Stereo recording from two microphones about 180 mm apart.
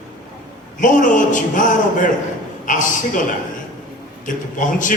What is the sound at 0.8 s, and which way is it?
A man's voice, 45° left (ahead or behind).